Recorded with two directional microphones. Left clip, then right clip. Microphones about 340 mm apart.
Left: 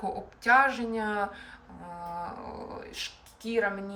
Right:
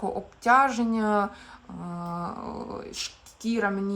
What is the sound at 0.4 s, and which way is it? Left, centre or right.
Speech, centre.